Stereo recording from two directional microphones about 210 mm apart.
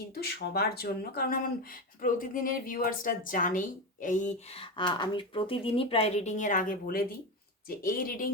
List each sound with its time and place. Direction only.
0.1 s speech: 50° left (ahead or behind)